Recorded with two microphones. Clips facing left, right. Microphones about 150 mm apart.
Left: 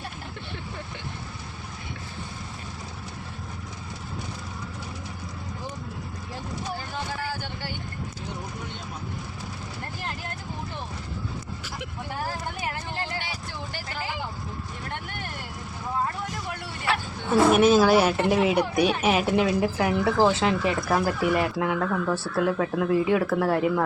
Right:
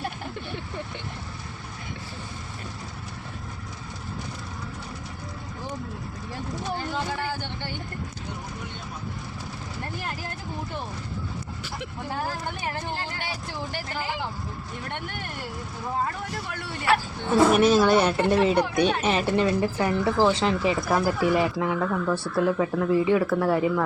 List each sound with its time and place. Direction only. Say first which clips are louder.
17.5 s speech: left 3 dB; centre (ahead or behind)